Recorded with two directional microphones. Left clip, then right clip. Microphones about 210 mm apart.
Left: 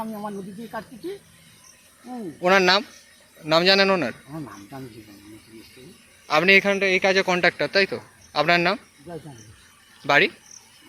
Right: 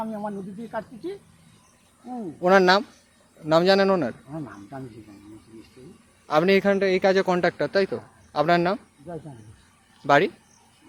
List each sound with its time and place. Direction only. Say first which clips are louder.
0.2 s speech: even; centre (ahead or behind)
2.4 s a man's voice: even; 20° right (ahead or behind)
4.3 s speech: even; 5° right (ahead or behind)
6.2 s a man's voice: left 3 dB; 20° right (ahead or behind)